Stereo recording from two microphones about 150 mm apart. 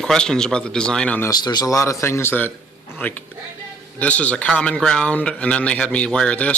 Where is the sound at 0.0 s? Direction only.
5° left (ahead or behind).